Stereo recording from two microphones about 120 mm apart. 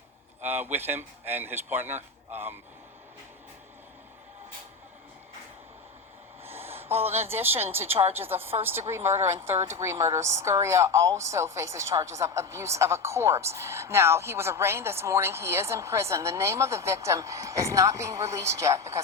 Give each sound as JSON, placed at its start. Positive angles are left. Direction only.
{"t": 0.4, "sound": "a man's voice", "side_deg": -15}
{"t": 6.4, "sound": "a sound", "side_deg": -20}
{"t": 7.0, "sound": "a woman's voice", "side_deg": -20}